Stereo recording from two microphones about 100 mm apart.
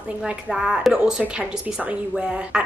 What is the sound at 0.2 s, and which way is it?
A woman's voice, 5° right (ahead or behind).